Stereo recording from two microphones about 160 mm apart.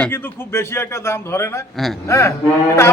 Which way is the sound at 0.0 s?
15° left (ahead or behind).